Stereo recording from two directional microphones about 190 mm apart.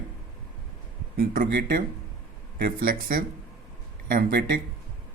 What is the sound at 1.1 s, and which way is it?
Speech, 50° right (ahead or behind).